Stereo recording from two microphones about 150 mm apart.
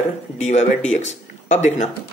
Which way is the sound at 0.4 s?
50° left (ahead or behind).